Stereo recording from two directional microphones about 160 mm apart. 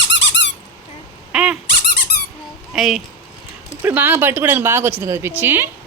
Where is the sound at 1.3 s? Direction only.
5° right (ahead or behind).